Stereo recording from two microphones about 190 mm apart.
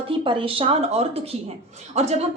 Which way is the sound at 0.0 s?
25° right (ahead or behind).